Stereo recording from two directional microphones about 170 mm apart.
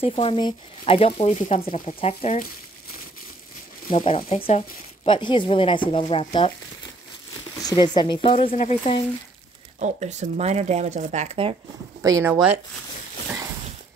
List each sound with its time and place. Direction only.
0.0 s speech: 35° left (ahead or behind)
4.3 s speech: 35° left (ahead or behind)
7.6 s speech: 25° left (ahead or behind)
9.8 s speech: 45° right (ahead or behind)
12.0 s speech: 20° right (ahead or behind)